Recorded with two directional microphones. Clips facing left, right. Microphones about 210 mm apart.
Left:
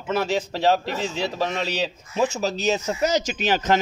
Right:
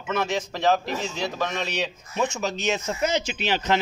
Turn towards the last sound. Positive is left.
turn(degrees=45)  # may be behind; listen again after turning